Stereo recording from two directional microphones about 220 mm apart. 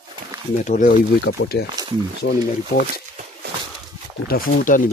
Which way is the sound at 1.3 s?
50° left (ahead or behind).